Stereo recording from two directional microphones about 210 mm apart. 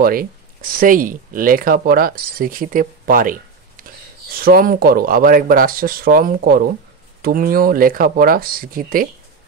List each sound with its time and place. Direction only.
0.0 s speech: 45° right (ahead or behind)